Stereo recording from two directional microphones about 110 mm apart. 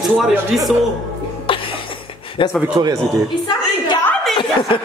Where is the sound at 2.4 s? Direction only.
55° left (ahead or behind).